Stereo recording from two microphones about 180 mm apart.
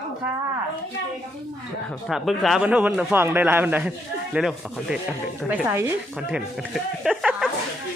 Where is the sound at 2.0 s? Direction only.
Centre (ahead or behind).